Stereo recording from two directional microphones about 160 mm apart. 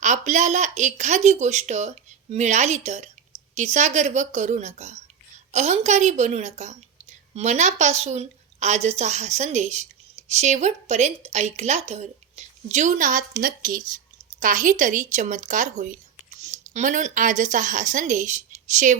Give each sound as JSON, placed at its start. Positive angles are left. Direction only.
{"t": 0.0, "sound": "a woman's voice", "side_deg": -50}